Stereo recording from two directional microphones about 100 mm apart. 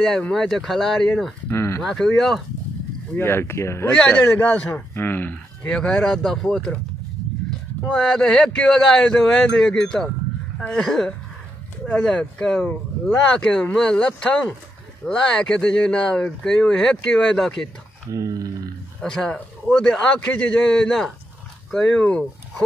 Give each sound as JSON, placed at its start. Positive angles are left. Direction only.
{"t": 0.0, "sound": "speech", "side_deg": 5}
{"t": 1.5, "sound": "speech", "side_deg": 25}
{"t": 1.8, "sound": "speech", "side_deg": 5}
{"t": 3.2, "sound": "speech", "side_deg": 25}
{"t": 3.9, "sound": "a man's voice", "side_deg": 10}
{"t": 7.8, "sound": "a man's voice", "side_deg": 5}
{"t": 18.1, "sound": "speech", "side_deg": -35}
{"t": 18.9, "sound": "a man's voice", "side_deg": 5}